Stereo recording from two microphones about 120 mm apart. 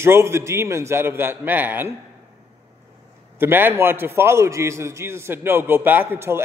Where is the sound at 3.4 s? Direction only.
15° right (ahead or behind).